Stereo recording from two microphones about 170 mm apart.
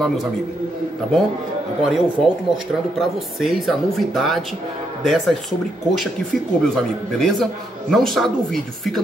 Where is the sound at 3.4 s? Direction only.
Centre (ahead or behind).